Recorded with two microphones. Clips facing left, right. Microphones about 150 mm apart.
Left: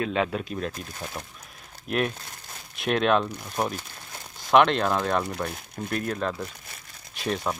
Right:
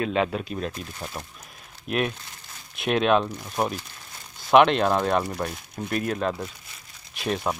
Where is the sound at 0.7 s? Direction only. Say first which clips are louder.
Right 1 dB; 25° right (ahead or behind).